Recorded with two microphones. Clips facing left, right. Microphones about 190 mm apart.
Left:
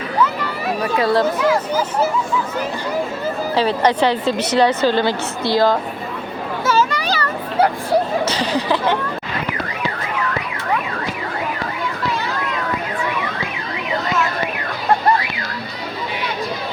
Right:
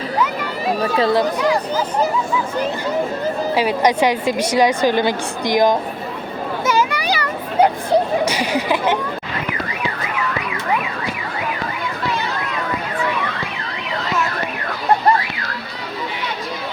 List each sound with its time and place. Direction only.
0.9 s speech: 25° right (ahead or behind)
1.2 s speech: 5° left (ahead or behind)
3.5 s a woman's voice: 10° right (ahead or behind)
6.7 s a sound: 15° right (ahead or behind)